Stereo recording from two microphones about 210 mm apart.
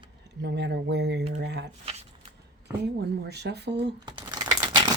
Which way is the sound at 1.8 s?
30° right (ahead or behind).